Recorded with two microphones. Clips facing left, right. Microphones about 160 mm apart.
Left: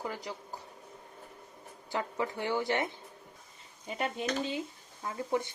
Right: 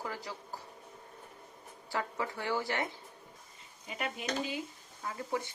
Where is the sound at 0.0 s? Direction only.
20° left (ahead or behind).